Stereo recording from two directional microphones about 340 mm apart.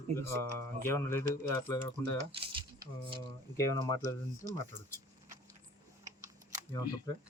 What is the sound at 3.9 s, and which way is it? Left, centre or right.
Speech, centre.